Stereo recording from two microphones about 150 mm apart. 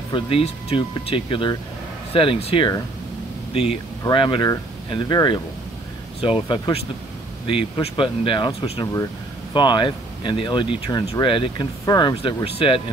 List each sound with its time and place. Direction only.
0.1 s speech: 40° left (ahead or behind)
4.0 s speech: 30° left (ahead or behind)
9.5 s speech: 30° left (ahead or behind)